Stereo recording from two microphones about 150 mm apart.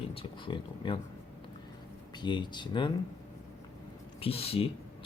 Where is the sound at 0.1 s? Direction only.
35° left (ahead or behind).